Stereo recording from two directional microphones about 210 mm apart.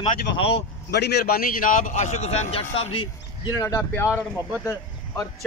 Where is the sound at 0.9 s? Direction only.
50° left (ahead or behind); by 2.9 s 30° left (ahead or behind).